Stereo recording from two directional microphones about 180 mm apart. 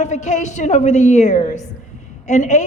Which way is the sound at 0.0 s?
40° left (ahead or behind).